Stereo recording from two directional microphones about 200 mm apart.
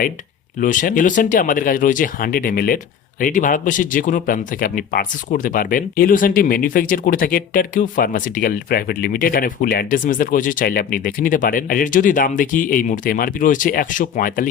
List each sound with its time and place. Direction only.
0.6 s speech: 40° left (ahead or behind)